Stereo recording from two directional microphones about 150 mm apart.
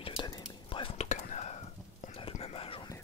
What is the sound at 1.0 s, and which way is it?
Whispering, 50° left (ahead or behind).